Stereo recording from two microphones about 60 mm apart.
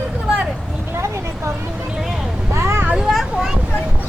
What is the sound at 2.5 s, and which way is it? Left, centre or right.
Vehicle, right.